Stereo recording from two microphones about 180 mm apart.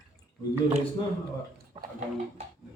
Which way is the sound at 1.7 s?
25° right (ahead or behind).